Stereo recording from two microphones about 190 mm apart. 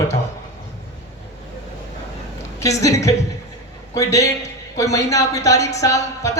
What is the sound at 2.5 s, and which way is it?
Speech, 15° left (ahead or behind).